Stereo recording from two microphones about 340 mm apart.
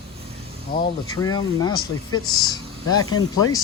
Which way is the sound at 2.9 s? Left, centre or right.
Left.